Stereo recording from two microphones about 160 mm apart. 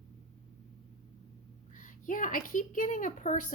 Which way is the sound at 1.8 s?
55° left (ahead or behind).